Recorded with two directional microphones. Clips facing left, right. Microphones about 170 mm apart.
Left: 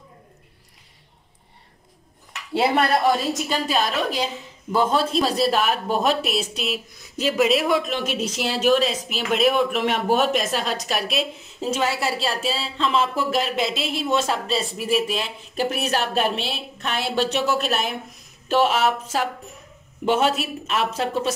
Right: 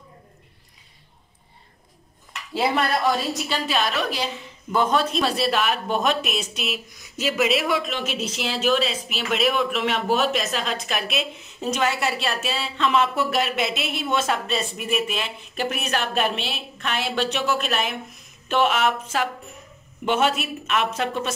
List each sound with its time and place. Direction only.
3.4 s speech: 45° left (ahead or behind)
4.7 s a woman's voice: 30° left (ahead or behind)
7.3 s speech: centre (ahead or behind)
7.8 s a woman's voice: 45° left (ahead or behind)